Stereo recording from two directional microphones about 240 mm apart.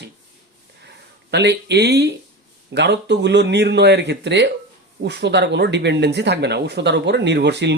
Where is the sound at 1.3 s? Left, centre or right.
Right.